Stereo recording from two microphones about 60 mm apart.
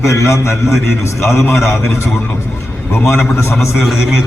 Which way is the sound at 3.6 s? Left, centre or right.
Centre.